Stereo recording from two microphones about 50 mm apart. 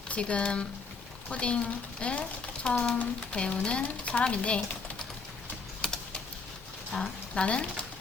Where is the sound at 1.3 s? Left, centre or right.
Left.